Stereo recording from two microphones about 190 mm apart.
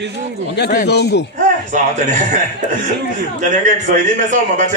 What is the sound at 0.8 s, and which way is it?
Speech, 60° left (ahead or behind).